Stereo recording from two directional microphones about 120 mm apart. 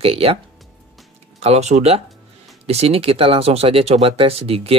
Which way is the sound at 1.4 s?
65° right (ahead or behind).